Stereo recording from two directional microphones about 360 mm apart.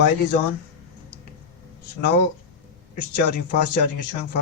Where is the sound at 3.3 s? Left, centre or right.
Left.